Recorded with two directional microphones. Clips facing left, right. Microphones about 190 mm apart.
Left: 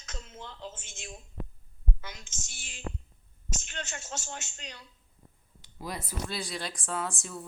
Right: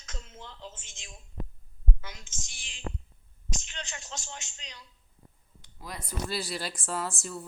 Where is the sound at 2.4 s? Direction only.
45° left (ahead or behind).